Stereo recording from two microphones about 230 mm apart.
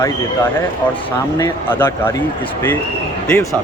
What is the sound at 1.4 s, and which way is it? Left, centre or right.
Speech, centre.